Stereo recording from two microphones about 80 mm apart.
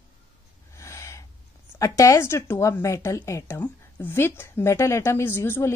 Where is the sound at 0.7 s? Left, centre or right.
Left.